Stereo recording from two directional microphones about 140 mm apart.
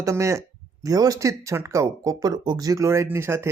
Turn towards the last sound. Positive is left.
turn(degrees=-20)  # may be behind; listen again after turning